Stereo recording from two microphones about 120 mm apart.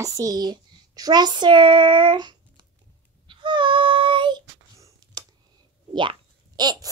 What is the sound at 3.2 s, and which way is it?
Child singing, 40° right (ahead or behind).